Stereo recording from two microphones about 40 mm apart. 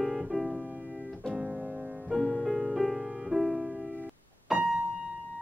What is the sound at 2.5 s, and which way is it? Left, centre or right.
Music, centre.